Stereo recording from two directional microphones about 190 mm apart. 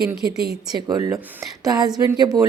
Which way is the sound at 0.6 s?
20° right (ahead or behind).